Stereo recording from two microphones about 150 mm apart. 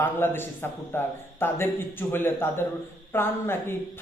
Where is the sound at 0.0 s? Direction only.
15° left (ahead or behind).